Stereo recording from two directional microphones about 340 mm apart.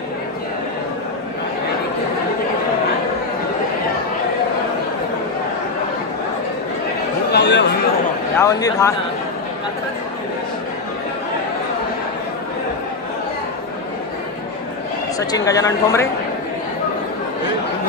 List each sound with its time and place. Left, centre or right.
7.2 s chatter: left
8.4 s speech: centre
15.1 s speech: centre